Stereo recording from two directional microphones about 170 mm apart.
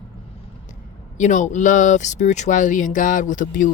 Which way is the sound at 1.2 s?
45° left (ahead or behind).